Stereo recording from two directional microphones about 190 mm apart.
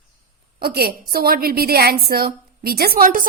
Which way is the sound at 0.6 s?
55° right (ahead or behind).